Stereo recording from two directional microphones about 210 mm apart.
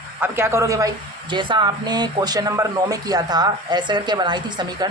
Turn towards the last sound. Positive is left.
turn(degrees=-20)  # may be behind; listen again after turning